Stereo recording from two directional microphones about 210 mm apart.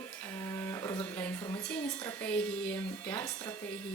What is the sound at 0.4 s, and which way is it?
Speech, 10° left (ahead or behind).